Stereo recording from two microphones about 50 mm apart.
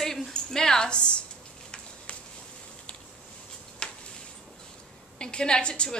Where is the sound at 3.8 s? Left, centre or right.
Left.